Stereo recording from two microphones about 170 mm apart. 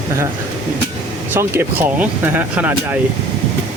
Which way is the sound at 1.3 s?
15° right (ahead or behind).